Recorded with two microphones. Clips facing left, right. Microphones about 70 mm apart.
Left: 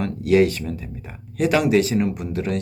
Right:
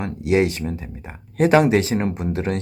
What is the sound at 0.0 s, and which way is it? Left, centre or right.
Speech, right.